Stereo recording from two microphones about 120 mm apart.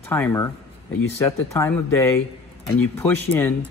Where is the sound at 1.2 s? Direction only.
25° left (ahead or behind).